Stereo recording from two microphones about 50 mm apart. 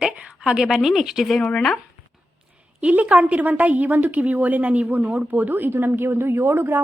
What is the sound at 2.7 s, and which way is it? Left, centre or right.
A woman's voice, right.